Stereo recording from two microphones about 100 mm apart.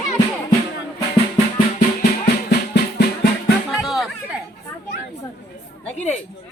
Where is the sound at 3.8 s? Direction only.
Centre (ahead or behind).